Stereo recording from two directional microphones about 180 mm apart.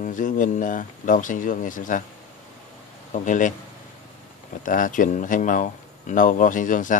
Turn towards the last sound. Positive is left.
turn(degrees=45)  # may be behind; listen again after turning